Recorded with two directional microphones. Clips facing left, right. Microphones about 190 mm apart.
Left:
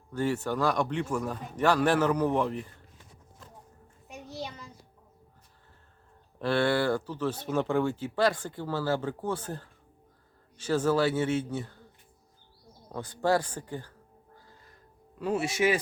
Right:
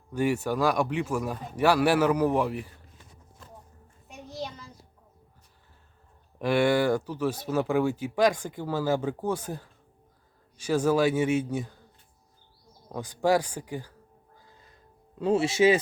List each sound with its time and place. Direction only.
0.1 s speech: 10° right (ahead or behind)
6.4 s speech: 10° right (ahead or behind)
12.9 s speech: 15° right (ahead or behind)
15.2 s speech: 25° right (ahead or behind)